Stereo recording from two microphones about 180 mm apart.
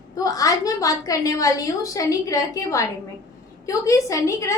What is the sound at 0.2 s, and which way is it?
A woman's voice, 20° left (ahead or behind).